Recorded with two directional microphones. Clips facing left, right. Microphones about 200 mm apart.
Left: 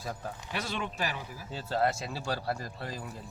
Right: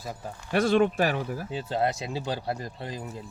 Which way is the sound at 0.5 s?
55° right (ahead or behind).